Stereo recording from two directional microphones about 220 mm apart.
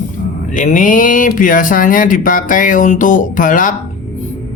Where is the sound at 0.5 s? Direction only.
35° left (ahead or behind).